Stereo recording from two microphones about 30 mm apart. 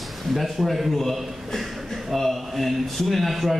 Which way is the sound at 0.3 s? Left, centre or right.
Centre.